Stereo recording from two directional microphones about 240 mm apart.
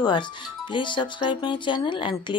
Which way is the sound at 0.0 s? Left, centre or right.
Centre.